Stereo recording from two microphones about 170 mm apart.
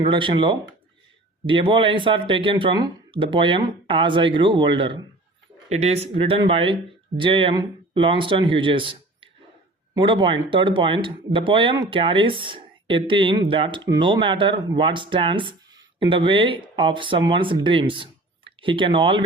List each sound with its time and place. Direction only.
0.0 s speech: 30° right (ahead or behind)
5.6 s speech: 40° right (ahead or behind)